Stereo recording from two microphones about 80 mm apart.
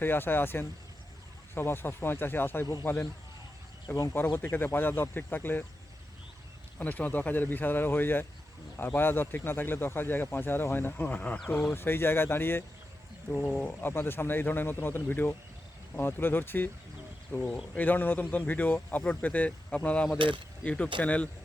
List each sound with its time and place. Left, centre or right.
0.0 s speech: left
3.8 s speech: left
4.5 s speech: left
6.7 s speech: left
13.3 s speech: centre
13.8 s speech: left
17.7 s speech: left
20.1 s mechanisms: right
20.7 s speech: centre